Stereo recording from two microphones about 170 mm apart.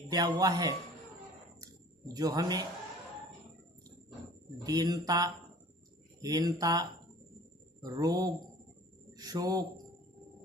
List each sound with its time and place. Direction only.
0.1 s speech: 20° right (ahead or behind)
1.6 s drip: 20° right (ahead or behind)
4.5 s speech: 20° right (ahead or behind)